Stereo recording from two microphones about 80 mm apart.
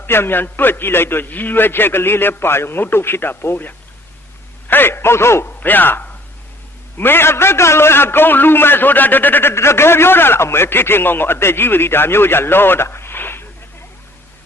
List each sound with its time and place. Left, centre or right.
0.0 s a man's voice: left
5.5 s a man's voice: left